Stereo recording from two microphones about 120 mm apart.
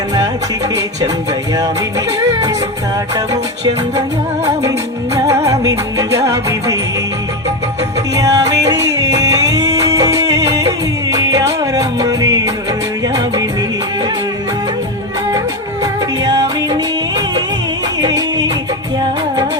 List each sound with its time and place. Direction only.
5.5 s music: 30° right (ahead or behind)
8.1 s music: 30° right (ahead or behind)
15.8 s music: 35° right (ahead or behind)